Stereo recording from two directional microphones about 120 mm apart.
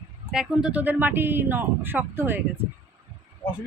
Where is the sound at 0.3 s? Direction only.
5° right (ahead or behind).